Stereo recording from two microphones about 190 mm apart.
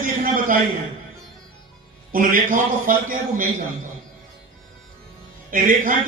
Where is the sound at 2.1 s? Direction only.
45° right (ahead or behind).